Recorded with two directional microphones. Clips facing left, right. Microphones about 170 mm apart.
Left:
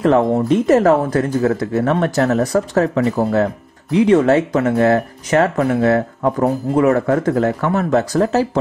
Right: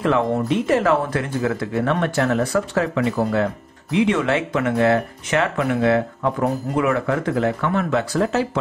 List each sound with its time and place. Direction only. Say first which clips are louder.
0.0 s speech: left 5 dB; 40° left (ahead or behind)